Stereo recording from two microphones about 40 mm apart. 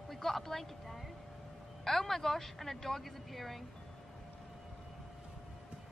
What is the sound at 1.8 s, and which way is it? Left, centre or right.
Speech, centre.